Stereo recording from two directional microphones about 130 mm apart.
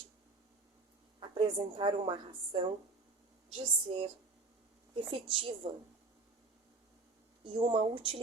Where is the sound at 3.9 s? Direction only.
45° right (ahead or behind).